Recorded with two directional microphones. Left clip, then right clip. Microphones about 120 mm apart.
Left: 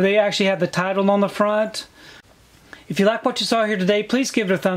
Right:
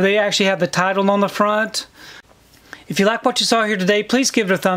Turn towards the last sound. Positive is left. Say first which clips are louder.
# right 3 dB
turn(degrees=-35)  # may be behind; listen again after turning